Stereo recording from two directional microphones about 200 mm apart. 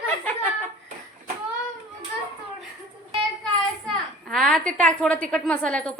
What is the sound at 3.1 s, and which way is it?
A child's voice, centre (ahead or behind).